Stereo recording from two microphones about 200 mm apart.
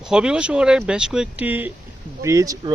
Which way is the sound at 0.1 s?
5° right (ahead or behind).